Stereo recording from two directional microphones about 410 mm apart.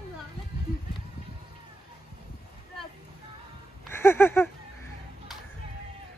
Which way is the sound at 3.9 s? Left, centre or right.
Centre.